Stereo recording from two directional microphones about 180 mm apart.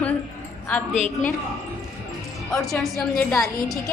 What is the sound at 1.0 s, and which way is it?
Speech, 40° left (ahead or behind).